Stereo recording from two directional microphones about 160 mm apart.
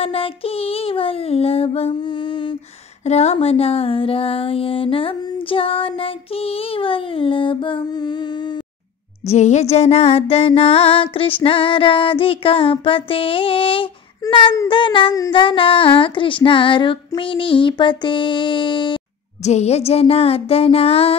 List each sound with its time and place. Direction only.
0.0 s music: 35° left (ahead or behind)
3.1 s music: 45° left (ahead or behind); by 8.5 s 30° left (ahead or behind)
9.2 s music: 45° left (ahead or behind)
19.4 s music: 45° left (ahead or behind)